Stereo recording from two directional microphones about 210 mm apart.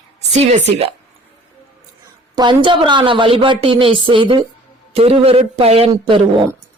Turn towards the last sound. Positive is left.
turn(degrees=-25)  # may be behind; listen again after turning